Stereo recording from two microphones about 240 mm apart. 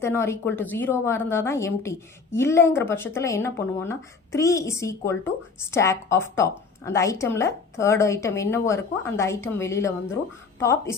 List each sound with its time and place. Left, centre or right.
0.0 s a woman's voice: centre